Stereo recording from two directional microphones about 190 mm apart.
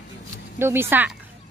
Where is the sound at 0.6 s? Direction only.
10° right (ahead or behind).